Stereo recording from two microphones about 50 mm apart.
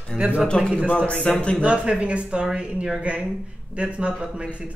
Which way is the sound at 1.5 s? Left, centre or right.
Right.